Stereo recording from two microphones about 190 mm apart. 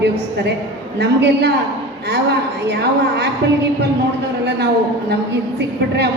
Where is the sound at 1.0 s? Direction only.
60° right (ahead or behind).